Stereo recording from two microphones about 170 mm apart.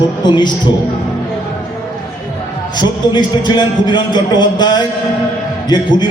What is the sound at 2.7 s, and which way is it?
A man's voice, 25° left (ahead or behind).